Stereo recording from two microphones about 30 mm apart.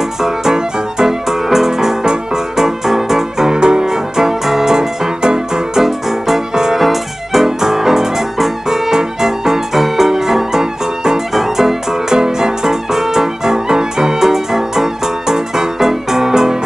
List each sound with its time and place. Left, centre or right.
0.2 s music: centre
3.5 s music: right
6.8 s music: centre
7.4 s music: centre